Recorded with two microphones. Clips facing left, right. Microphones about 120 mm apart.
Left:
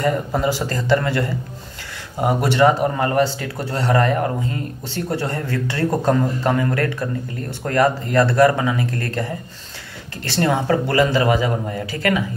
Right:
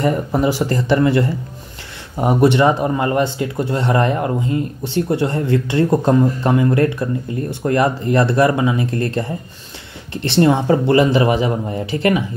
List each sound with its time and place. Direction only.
0.0 s speech: 20° right (ahead or behind)